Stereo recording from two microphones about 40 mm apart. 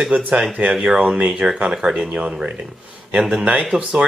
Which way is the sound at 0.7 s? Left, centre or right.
Centre.